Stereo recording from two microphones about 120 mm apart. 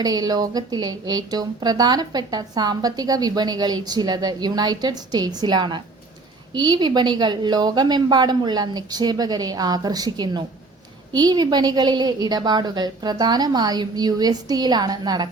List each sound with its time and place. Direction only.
0.0 s speech: 35° right (ahead or behind)